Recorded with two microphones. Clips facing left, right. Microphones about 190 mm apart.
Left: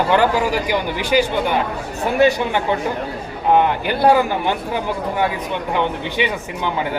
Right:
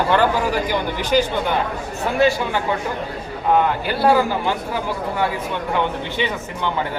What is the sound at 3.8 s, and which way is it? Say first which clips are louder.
Speech: left 2 dB; 15° left (ahead or behind).